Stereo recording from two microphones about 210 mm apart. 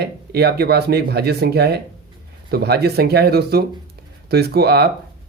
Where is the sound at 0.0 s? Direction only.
50° right (ahead or behind).